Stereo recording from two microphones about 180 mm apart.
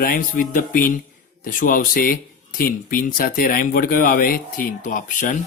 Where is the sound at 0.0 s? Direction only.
50° left (ahead or behind).